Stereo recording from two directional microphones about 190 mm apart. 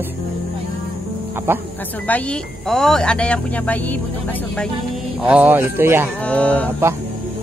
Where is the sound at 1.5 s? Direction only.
10° right (ahead or behind).